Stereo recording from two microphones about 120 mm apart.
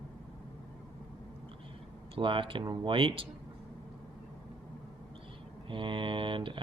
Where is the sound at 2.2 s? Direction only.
45° right (ahead or behind).